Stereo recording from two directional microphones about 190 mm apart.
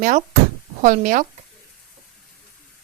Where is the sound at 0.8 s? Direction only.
45° right (ahead or behind).